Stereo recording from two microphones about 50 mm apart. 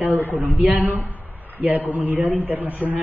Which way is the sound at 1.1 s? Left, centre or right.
Right.